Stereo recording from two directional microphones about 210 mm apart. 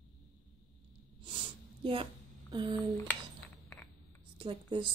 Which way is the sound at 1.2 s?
25° right (ahead or behind).